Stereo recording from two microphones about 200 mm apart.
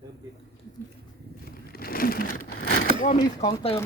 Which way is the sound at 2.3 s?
90° left.